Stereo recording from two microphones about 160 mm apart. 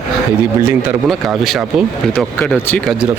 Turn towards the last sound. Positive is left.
turn(degrees=0)  # may be behind; listen again after turning